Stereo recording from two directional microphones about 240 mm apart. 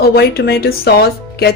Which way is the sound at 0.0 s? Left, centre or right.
Left.